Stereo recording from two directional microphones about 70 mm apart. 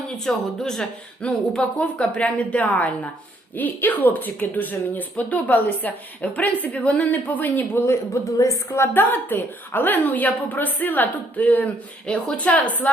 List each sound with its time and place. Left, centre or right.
0.3 s speech: centre; by 7.8 s left
7.9 s a woman's voice: left
8.9 s speech: left